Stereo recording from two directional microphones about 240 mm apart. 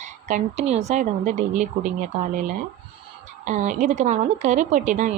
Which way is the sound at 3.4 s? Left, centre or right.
Right.